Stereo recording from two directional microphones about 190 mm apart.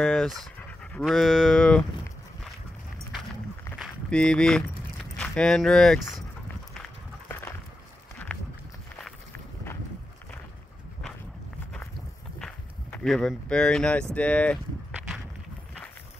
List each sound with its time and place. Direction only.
0.0 s speech: 5° left (ahead or behind)
3.7 s a sound: centre (ahead or behind)
5.1 s speech: 5° left (ahead or behind)
8.3 s walk: 5° left (ahead or behind)
12.4 s a sound: 5° left (ahead or behind)
14.1 s speech: 5° left (ahead or behind)